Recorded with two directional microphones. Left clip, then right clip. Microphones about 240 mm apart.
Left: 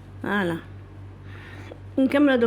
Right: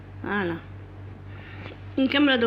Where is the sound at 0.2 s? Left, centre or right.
Left.